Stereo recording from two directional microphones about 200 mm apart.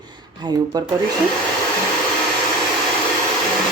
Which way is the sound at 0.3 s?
20° right (ahead or behind).